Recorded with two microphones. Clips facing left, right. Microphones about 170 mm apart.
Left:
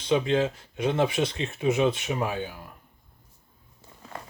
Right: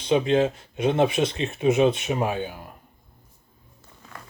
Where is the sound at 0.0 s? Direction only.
20° right (ahead or behind).